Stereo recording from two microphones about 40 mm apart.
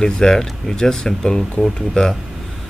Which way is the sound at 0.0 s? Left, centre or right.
Centre.